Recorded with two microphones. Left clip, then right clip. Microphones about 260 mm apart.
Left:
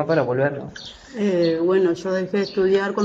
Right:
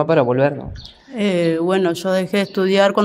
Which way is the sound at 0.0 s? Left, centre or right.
Right.